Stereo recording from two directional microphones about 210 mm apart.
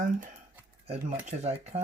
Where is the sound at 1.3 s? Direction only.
30° right (ahead or behind).